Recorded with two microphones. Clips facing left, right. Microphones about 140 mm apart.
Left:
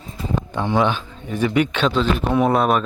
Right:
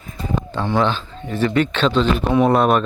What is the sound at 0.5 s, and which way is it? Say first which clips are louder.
A man's voice: even; 15° left (ahead or behind).